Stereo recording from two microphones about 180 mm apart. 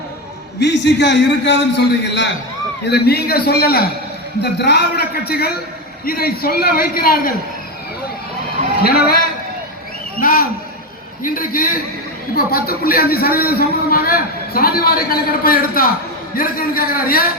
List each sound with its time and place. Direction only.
0.6 s a man's voice: 75° left (ahead or behind)
2.9 s a man's voice: 60° left (ahead or behind)
8.8 s a man's voice: 60° left (ahead or behind)
10.2 s a man's voice: 50° left (ahead or behind)